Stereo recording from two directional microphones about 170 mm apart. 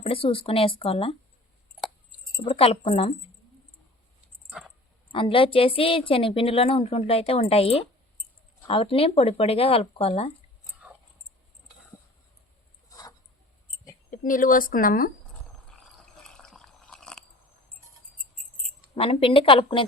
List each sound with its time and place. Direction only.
0.0 s a woman's voice: 30° left (ahead or behind)
2.4 s a woman's voice: 35° left (ahead or behind)
5.1 s a woman's voice: 30° left (ahead or behind)
14.1 s speech: 50° left (ahead or behind)
15.7 s a sound: 5° left (ahead or behind)
18.9 s a woman's voice: 35° left (ahead or behind)